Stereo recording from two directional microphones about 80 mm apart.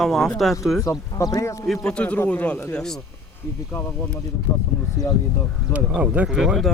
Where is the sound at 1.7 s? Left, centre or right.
Centre.